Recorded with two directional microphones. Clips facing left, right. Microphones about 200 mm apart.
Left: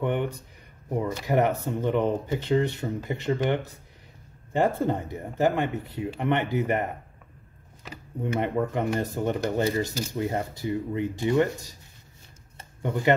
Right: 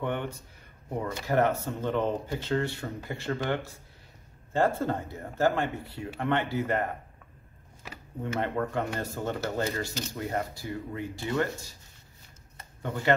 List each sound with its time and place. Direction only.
0.0 s speech: 15° left (ahead or behind)
8.2 s speech: 15° left (ahead or behind)
12.8 s speech: 15° left (ahead or behind)